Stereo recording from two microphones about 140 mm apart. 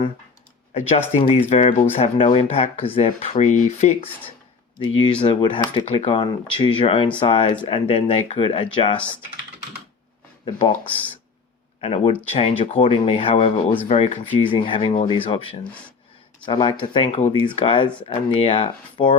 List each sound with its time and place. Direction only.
0.7 s speech: 45° left (ahead or behind)
4.8 s speech: 35° left (ahead or behind)
11.8 s speech: 45° left (ahead or behind)
16.5 s speech: 35° left (ahead or behind)
17.3 s speech: 35° left (ahead or behind)